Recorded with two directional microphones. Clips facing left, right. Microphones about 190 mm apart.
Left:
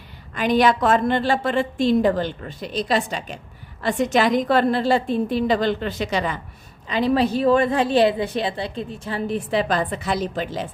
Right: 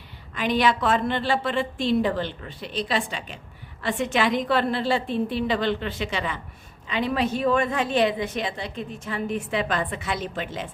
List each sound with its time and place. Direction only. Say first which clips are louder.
0.3 s a woman's voice: left 4 dB; 45° left (ahead or behind)